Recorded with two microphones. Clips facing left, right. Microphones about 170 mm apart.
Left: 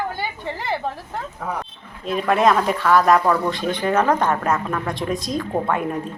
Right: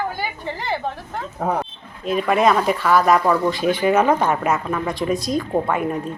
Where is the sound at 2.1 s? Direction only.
Centre (ahead or behind).